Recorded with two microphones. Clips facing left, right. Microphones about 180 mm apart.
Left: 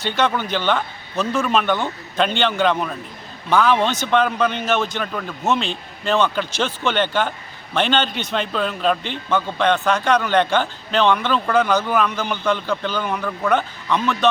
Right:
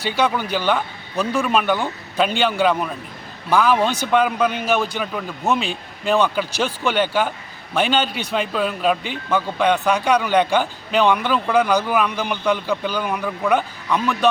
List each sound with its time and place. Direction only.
0.0 s a man's voice: 10° right (ahead or behind)